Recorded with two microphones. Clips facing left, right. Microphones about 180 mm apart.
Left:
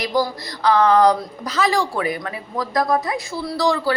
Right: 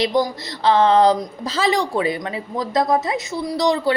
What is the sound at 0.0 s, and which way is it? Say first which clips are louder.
A woman's voice: right 2 dB; 25° right (ahead or behind).